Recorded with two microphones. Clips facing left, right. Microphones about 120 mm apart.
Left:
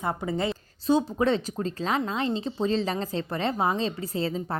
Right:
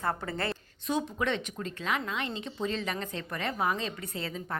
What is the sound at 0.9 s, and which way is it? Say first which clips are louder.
Speech: left 7 dB; 30° left (ahead or behind).